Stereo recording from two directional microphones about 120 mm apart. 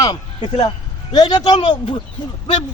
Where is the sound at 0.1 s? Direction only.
45° left (ahead or behind).